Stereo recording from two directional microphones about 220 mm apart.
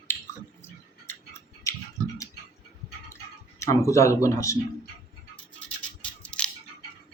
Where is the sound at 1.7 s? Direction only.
15° left (ahead or behind).